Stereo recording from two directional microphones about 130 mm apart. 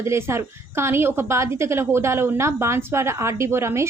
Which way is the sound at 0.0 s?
20° right (ahead or behind).